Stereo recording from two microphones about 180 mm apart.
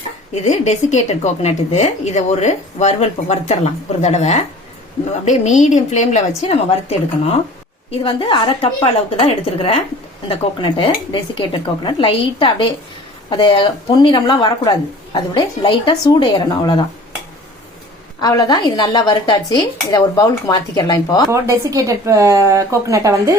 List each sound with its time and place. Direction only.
0.4 s a woman's voice: 40° left (ahead or behind)
7.9 s a woman's voice: 30° left (ahead or behind)
18.2 s a woman's voice: 20° left (ahead or behind)
21.2 s speech: 15° right (ahead or behind)